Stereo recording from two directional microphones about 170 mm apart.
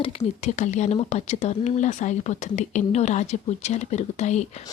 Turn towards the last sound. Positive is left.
turn(degrees=40)  # may be behind; listen again after turning